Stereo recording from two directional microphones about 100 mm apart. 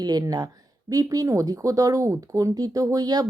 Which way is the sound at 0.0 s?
40° right (ahead or behind).